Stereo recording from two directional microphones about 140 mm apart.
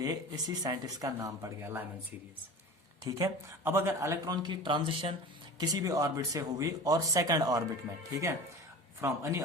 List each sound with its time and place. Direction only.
0.0 s speech: 25° right (ahead or behind)
3.0 s speech: 20° right (ahead or behind)
4.4 s speech: 35° right (ahead or behind)
5.5 s speech: 30° right (ahead or behind)
9.0 s speech: 20° right (ahead or behind)